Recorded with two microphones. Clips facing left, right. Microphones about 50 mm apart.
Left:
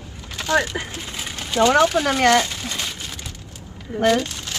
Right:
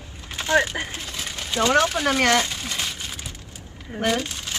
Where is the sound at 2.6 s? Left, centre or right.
Centre.